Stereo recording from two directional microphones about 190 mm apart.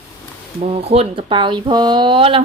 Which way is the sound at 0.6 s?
30° right (ahead or behind).